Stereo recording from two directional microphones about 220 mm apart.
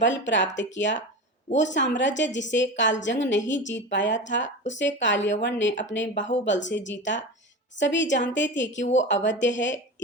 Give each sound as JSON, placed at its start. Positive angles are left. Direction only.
{"t": 0.0, "sound": "a woman's voice", "side_deg": 55}